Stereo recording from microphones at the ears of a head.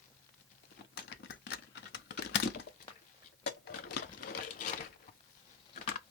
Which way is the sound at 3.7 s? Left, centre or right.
Left.